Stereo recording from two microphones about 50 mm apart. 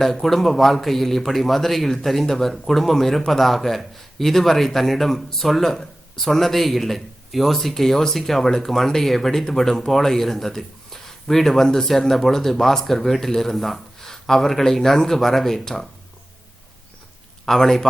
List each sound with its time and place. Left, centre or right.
0.0 s speech: centre
17.4 s a man's voice: centre